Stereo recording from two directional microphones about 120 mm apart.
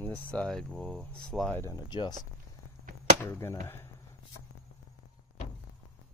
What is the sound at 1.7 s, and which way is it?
Speech, 35° left (ahead or behind).